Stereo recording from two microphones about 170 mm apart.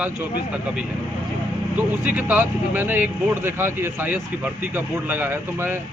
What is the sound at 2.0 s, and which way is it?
Speech, 10° right (ahead or behind).